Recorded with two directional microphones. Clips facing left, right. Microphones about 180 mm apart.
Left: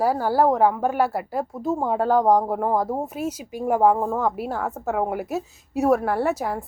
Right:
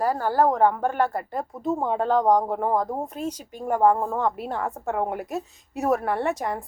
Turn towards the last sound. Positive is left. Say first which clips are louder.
# left 2 dB
turn(degrees=0)  # may be behind; listen again after turning